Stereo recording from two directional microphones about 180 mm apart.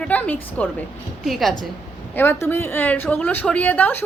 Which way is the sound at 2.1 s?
10° left (ahead or behind).